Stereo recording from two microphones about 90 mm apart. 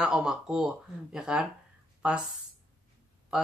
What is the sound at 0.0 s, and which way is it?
Speech, 10° right (ahead or behind).